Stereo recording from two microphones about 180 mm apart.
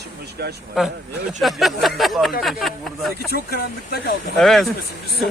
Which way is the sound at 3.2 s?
60° left (ahead or behind).